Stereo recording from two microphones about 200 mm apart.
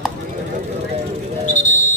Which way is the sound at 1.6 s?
40° left (ahead or behind).